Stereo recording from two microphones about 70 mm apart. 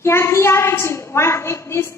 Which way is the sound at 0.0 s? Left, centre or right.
Left.